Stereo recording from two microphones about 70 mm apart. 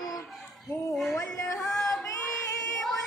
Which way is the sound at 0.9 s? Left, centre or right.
Centre.